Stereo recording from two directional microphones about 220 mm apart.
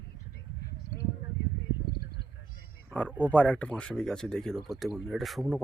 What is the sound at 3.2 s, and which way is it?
Speech, 5° left (ahead or behind).